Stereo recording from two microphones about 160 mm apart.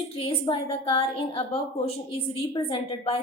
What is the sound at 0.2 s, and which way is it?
A woman's voice, 30° left (ahead or behind).